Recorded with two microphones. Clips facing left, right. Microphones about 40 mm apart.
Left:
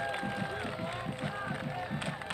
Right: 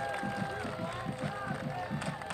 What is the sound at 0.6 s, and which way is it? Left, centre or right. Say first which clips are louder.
Run: left 1 dB; left.